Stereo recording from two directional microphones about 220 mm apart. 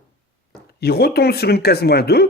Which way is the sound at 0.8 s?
45° left (ahead or behind).